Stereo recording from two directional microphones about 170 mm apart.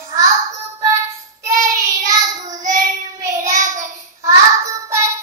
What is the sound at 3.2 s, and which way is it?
Child singing, 20° right (ahead or behind).